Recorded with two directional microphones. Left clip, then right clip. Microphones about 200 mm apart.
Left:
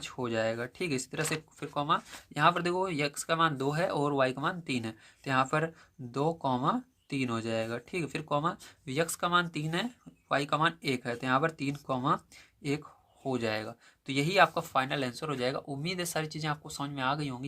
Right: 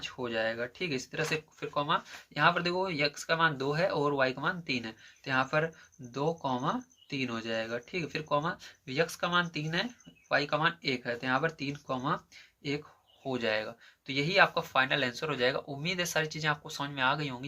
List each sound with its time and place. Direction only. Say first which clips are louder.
0.0 s speech: left 1 dB; 45° left (ahead or behind)
13.2 s speech: right 1 dB; 35° left (ahead or behind)